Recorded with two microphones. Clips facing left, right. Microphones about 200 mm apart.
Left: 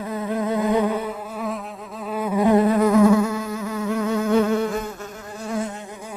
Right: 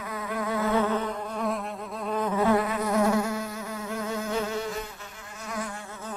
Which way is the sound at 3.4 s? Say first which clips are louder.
Left 9 dB; 85° left.